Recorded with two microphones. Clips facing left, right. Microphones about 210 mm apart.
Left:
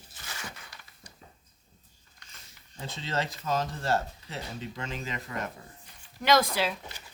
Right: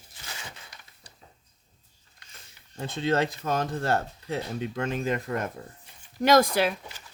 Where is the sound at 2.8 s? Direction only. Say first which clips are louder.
Right 8 dB; 55° right (ahead or behind).